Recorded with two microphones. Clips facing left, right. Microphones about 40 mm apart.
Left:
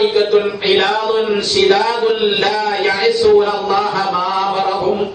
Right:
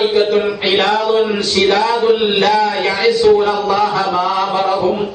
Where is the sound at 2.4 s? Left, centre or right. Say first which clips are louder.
Right 2 dB; centre.